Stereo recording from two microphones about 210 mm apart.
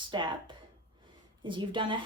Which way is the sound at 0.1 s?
20° right (ahead or behind).